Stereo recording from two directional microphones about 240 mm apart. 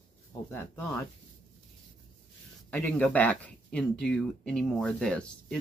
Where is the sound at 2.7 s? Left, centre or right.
Centre.